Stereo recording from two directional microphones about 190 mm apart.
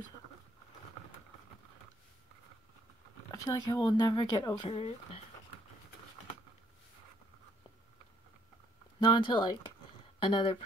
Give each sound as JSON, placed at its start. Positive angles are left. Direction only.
{"t": 3.3, "sound": "speech", "side_deg": 20}
{"t": 9.2, "sound": "speech", "side_deg": 25}